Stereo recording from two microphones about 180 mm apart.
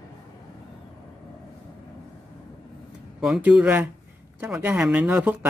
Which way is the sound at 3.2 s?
Centre (ahead or behind).